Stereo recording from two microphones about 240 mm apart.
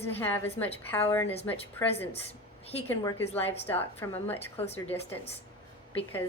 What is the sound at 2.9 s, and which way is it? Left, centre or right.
A woman's voice, centre.